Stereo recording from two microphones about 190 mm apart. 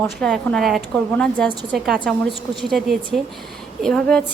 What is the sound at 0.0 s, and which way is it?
A woman's voice, 5° left (ahead or behind).